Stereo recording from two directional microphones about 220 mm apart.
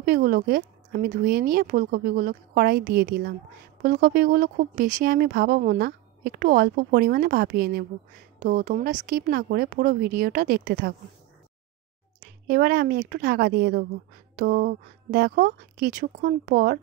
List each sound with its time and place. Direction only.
0.0 s speech: 40° right (ahead or behind)
12.2 s a woman's voice: 45° right (ahead or behind)